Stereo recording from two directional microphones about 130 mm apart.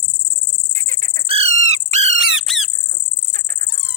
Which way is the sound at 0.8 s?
90° right.